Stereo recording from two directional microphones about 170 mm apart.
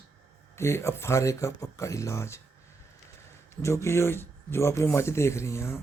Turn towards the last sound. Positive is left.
turn(degrees=15)  # may be behind; listen again after turning